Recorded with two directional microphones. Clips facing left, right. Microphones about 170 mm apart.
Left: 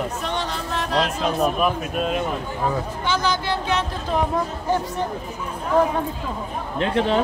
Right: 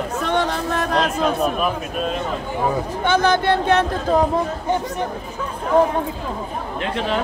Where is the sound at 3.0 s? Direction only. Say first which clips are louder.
Right 7 dB; 55° right (ahead or behind).